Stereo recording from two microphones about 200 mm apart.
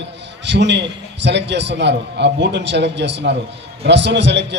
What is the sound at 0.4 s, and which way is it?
A man's voice, 60° right (ahead or behind).